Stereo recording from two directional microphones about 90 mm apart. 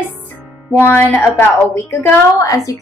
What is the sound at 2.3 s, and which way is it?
Speech, 40° left (ahead or behind).